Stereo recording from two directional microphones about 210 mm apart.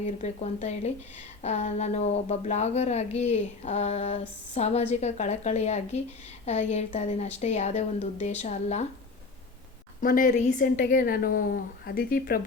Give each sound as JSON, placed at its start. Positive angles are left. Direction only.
{"t": 0.0, "sound": "speech", "side_deg": 30}
{"t": 10.0, "sound": "a woman's voice", "side_deg": 40}